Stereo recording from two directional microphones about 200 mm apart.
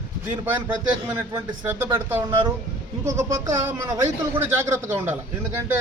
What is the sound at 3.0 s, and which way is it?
Speech, 15° right (ahead or behind).